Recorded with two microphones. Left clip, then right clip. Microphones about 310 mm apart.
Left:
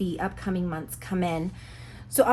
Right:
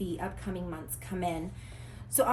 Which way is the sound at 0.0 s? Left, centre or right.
Centre.